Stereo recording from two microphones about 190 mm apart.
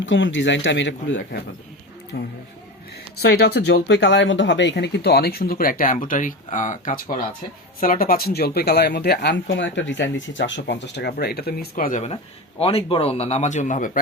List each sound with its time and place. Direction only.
0.0 s speech: 75° left (ahead or behind)
2.1 s speech: 55° left (ahead or behind); by 12.1 s 40° left (ahead or behind)
12.1 s a man's voice: 30° left (ahead or behind)